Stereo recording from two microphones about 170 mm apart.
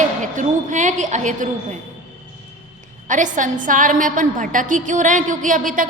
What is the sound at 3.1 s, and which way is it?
A woman's voice, 50° right (ahead or behind).